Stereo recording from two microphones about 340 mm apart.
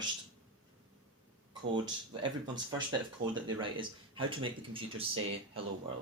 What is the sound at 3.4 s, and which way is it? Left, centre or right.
Speech, centre.